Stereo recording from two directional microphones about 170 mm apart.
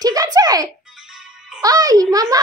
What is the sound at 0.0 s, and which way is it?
Music, 20° right (ahead or behind).